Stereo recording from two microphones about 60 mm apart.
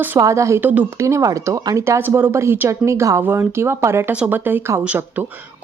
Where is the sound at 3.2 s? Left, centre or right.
Right.